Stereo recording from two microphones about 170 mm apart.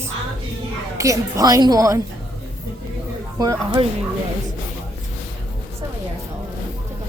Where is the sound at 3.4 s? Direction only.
20° right (ahead or behind).